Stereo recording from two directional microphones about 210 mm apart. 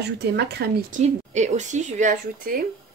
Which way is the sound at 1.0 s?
35° right (ahead or behind).